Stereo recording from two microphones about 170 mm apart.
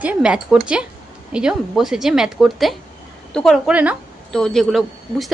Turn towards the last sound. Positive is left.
turn(degrees=0)  # may be behind; listen again after turning